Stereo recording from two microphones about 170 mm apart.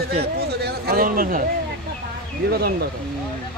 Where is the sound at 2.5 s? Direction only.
70° right (ahead or behind).